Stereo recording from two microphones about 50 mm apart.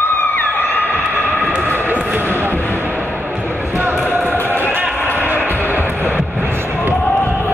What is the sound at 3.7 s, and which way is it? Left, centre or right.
Basketball bounce, right.